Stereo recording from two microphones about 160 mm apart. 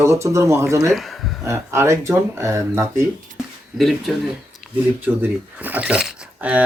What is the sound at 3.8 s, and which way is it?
Speech, centre (ahead or behind).